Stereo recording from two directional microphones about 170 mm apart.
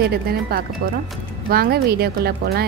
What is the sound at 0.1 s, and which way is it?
Speech, 65° right (ahead or behind).